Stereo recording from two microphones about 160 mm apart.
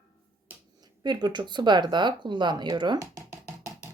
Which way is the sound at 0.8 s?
25° right (ahead or behind).